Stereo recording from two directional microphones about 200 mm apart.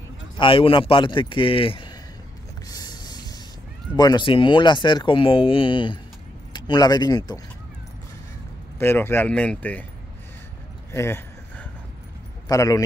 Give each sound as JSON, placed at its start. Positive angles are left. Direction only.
{"t": 0.4, "sound": "speech", "side_deg": 25}
{"t": 2.7, "sound": "a sound", "side_deg": 20}
{"t": 3.9, "sound": "speech", "side_deg": 20}
{"t": 8.7, "sound": "speech", "side_deg": 10}
{"t": 10.9, "sound": "keys jangling", "side_deg": 15}
{"t": 12.4, "sound": "speech", "side_deg": 15}